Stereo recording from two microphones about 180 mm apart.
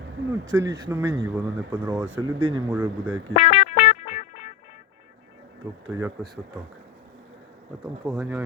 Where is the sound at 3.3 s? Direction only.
45° left (ahead or behind).